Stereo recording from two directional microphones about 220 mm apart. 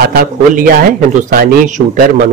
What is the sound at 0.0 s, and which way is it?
Speech, 45° right (ahead or behind).